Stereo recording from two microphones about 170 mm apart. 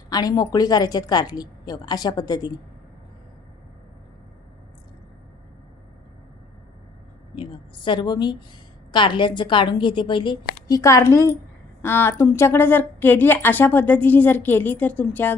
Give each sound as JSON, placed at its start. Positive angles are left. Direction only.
{"t": 0.1, "sound": "a woman's voice", "side_deg": 20}
{"t": 7.3, "sound": "a sound", "side_deg": 30}
{"t": 8.9, "sound": "a woman's voice", "side_deg": 30}